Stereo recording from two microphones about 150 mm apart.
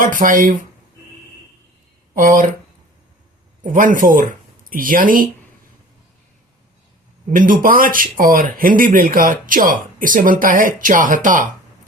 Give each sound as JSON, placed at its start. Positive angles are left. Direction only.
{"t": 0.0, "sound": "speech", "side_deg": -65}
{"t": 2.1, "sound": "speech", "side_deg": -65}
{"t": 3.6, "sound": "speech", "side_deg": -60}
{"t": 7.3, "sound": "speech", "side_deg": -65}